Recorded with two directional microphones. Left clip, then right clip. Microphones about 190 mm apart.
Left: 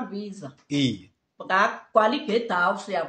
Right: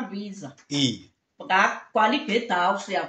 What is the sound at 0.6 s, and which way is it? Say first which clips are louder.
Speech: right 1 dB; 40° left (ahead or behind).